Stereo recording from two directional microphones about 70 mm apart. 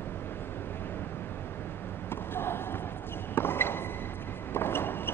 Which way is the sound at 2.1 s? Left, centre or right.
Left.